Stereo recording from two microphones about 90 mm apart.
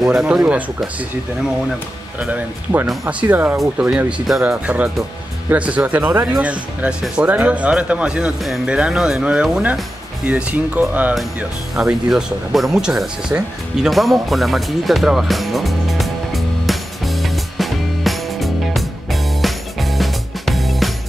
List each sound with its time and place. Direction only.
0.0 s speech: 5° right (ahead or behind)
2.1 s speech: 15° right (ahead or behind)
11.7 s speech: 5° right (ahead or behind)
13.8 s music: centre (ahead or behind)